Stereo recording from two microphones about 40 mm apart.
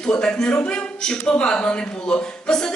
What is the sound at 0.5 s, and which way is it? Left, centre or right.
Speech, left.